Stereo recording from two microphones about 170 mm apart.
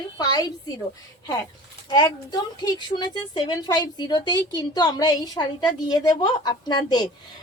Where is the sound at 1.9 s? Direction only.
25° left (ahead or behind).